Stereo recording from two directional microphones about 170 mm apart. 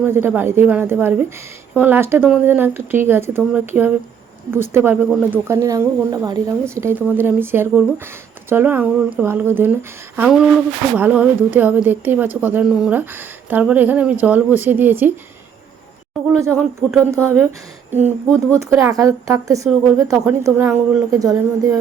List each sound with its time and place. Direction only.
0.0 s speech: 15° right (ahead or behind)
16.4 s speech: 15° right (ahead or behind)